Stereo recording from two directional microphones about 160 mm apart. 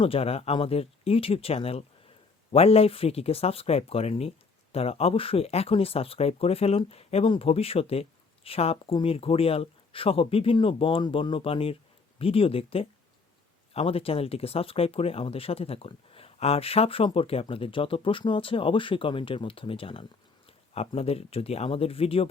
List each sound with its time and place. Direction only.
0.0 s speech: 35° left (ahead or behind)